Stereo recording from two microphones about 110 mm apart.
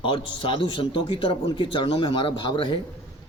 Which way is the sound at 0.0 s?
50° left (ahead or behind).